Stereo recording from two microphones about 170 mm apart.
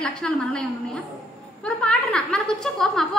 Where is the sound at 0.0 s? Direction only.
Centre (ahead or behind).